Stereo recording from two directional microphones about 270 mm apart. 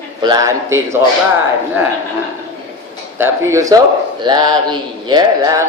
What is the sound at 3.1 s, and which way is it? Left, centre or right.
A man's voice, centre.